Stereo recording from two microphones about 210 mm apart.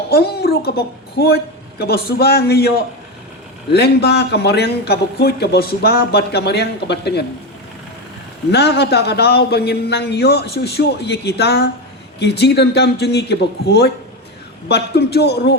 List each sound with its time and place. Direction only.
0.1 s a woman's voice: 50° left (ahead or behind)
8.5 s a man's voice: 50° left (ahead or behind)